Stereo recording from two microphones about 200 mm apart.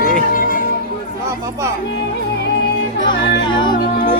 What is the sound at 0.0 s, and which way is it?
Music, 45° left (ahead or behind).